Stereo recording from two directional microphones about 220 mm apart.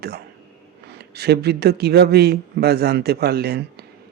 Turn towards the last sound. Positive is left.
turn(degrees=-45)  # may be behind; listen again after turning